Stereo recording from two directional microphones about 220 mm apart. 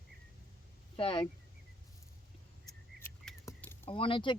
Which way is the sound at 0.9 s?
25° left (ahead or behind).